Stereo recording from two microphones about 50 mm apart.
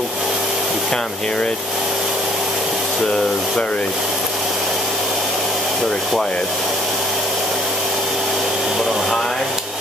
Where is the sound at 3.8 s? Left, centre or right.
Centre.